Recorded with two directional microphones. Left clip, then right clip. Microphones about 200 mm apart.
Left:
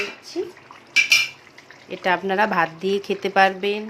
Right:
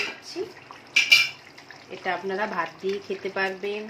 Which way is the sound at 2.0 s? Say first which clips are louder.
Left 8 dB; 50° left (ahead or behind).